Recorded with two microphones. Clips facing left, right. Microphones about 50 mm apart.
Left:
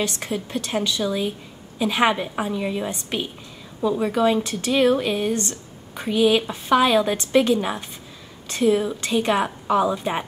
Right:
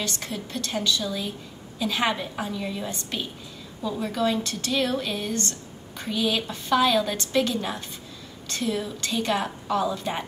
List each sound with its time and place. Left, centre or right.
0.0 s speech: centre